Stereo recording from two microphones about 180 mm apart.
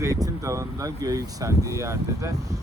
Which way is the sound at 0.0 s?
20° right (ahead or behind).